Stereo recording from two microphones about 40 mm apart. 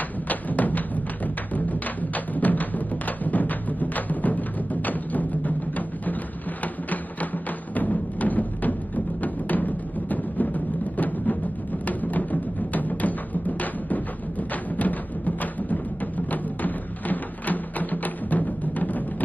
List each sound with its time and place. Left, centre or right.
0.3 s music: left
6.6 s printer: left
7.7 s music: left